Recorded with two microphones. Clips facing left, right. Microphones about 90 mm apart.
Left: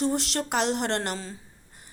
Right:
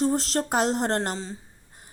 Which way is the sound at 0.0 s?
40° right (ahead or behind).